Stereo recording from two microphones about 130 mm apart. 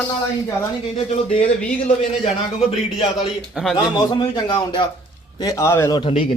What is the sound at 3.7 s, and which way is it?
Speech, 35° left (ahead or behind).